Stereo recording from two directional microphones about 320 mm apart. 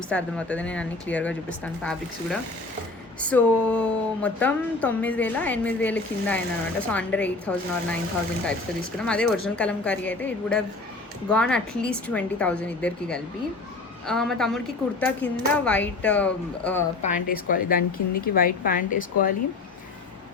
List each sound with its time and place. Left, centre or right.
0.1 s speech: centre
9.0 s speech: centre
17.0 s a woman's voice: left